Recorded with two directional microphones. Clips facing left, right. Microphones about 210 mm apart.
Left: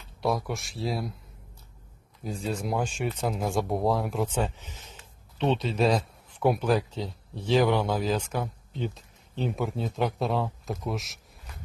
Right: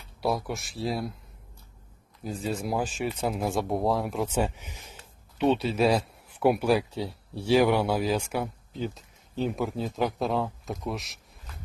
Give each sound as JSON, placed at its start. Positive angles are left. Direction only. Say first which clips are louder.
{"t": 0.2, "sound": "speech", "louder": "even", "side_deg": 0}
{"t": 2.2, "sound": "speech", "louder": "right 1 dB", "side_deg": 0}